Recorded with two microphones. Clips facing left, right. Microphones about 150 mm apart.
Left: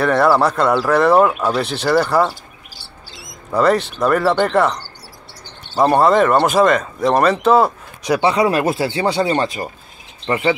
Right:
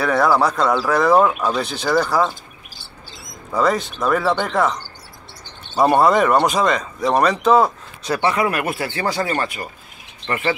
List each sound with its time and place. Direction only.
0.0 s speech: centre (ahead or behind)
3.5 s speech: 5° left (ahead or behind)
5.8 s speech: centre (ahead or behind); by 10.5 s 20° left (ahead or behind)